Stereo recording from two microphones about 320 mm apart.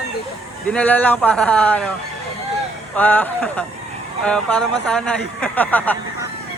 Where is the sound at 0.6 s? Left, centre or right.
Centre.